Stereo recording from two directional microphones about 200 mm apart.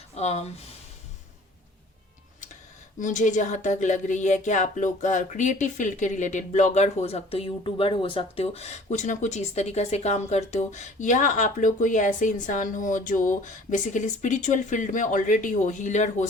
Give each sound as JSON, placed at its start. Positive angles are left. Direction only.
{"t": 0.2, "sound": "speech", "side_deg": 30}
{"t": 3.0, "sound": "speech", "side_deg": 40}